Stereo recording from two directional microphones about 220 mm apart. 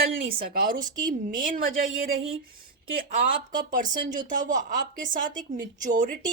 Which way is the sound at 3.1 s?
40° right (ahead or behind).